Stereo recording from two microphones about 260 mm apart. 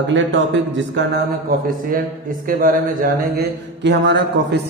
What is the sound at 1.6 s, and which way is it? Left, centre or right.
Speech, right.